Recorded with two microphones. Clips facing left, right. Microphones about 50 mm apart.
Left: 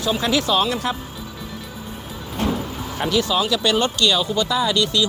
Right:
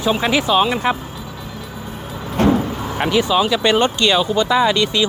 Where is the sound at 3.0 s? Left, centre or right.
Right.